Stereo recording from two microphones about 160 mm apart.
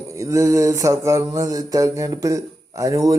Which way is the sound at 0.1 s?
20° right (ahead or behind).